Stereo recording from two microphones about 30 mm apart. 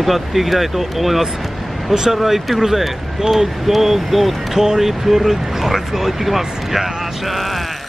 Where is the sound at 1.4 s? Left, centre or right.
Centre.